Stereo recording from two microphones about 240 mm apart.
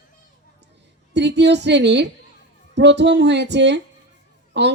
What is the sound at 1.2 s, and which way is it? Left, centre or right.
Speech, right.